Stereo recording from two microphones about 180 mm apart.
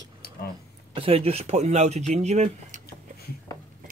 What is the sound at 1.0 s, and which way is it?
Speech, 30° right (ahead or behind).